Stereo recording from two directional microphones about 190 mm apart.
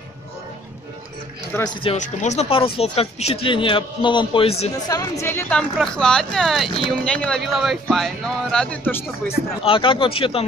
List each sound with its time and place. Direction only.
2.0 s a man's voice: 35° left (ahead or behind)
4.8 s speech: 20° left (ahead or behind)
9.3 s a man's voice: 30° left (ahead or behind)